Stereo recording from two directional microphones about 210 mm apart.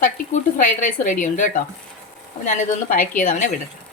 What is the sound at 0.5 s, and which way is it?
A woman's voice, 40° left (ahead or behind).